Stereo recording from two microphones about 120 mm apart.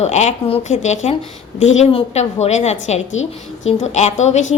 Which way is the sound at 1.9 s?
55° left (ahead or behind).